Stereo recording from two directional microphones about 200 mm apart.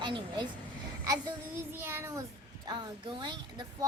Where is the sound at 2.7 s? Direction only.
20° right (ahead or behind).